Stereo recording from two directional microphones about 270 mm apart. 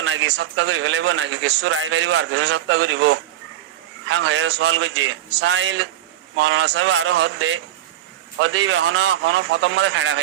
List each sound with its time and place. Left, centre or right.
0.0 s a man's voice: right